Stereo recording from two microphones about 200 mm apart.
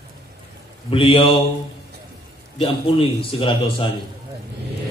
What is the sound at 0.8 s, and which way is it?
Speech, 25° left (ahead or behind).